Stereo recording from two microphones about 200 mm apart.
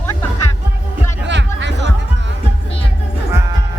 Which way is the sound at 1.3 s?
60° right (ahead or behind).